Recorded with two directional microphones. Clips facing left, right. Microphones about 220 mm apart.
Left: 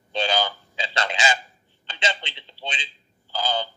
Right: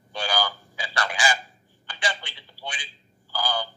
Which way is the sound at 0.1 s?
20° left (ahead or behind).